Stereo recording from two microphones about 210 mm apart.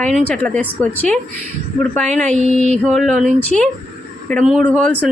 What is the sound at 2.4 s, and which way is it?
Mantra, 35° left (ahead or behind).